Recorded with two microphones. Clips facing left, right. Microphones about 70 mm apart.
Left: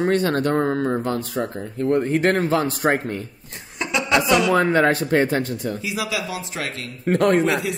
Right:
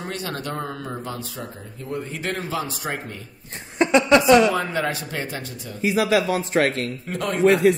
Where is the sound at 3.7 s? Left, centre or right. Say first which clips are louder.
Right 5 dB; right.